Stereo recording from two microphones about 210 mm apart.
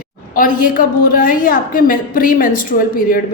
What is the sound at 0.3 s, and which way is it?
A woman's voice, 40° left (ahead or behind).